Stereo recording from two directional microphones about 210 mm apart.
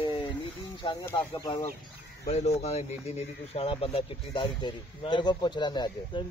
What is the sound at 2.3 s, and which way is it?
Speech, 30° left (ahead or behind).